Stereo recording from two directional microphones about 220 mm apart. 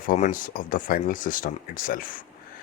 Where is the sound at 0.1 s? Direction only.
35° left (ahead or behind).